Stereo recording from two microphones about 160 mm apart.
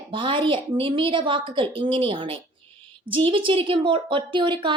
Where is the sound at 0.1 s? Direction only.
30° right (ahead or behind).